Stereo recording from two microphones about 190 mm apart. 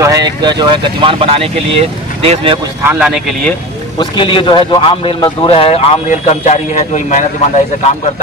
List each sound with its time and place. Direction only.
0.0 s speech: 20° right (ahead or behind)
2.9 s speech: 5° right (ahead or behind)
4.0 s a man's voice: 25° left (ahead or behind)